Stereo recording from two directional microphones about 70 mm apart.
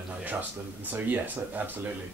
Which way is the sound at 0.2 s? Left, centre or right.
Right.